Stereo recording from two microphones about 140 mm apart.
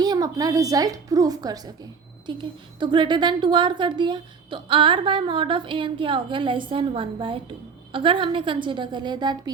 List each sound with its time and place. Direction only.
0.0 s a woman's voice: 25° right (ahead or behind)